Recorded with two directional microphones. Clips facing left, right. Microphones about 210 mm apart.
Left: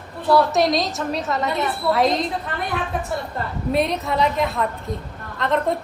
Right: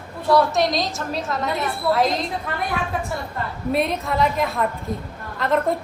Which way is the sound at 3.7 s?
Centre (ahead or behind).